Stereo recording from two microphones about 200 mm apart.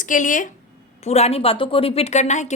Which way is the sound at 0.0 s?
40° left (ahead or behind).